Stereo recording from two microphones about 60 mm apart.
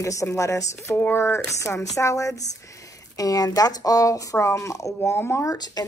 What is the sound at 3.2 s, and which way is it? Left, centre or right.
Speech, left.